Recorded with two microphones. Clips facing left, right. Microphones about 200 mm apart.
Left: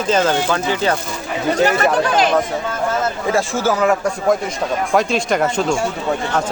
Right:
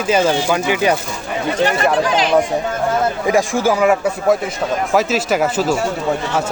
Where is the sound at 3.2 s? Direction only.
15° right (ahead or behind).